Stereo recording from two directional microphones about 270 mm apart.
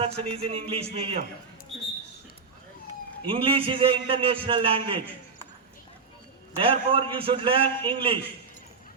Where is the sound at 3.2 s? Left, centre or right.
Centre.